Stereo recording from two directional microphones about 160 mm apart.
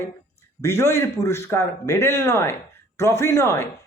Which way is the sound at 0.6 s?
15° left (ahead or behind).